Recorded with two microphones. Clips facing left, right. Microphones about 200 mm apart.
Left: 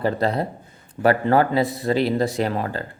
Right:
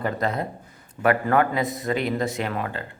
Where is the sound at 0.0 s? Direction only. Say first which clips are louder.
Left 4 dB; 30° left (ahead or behind).